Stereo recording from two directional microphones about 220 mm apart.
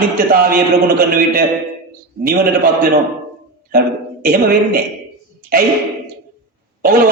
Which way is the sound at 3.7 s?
40° right (ahead or behind).